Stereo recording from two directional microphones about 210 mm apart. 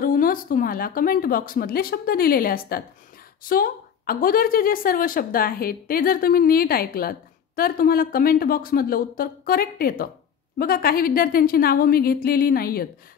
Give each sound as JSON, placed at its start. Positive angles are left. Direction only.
{"t": 0.0, "sound": "a woman's voice", "side_deg": 40}